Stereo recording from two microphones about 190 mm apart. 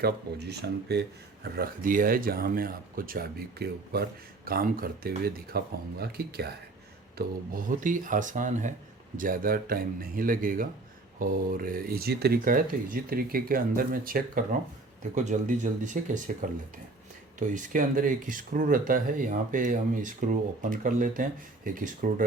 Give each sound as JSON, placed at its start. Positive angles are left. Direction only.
{"t": 0.0, "sound": "speech", "side_deg": -60}
{"t": 1.5, "sound": "speech", "side_deg": -50}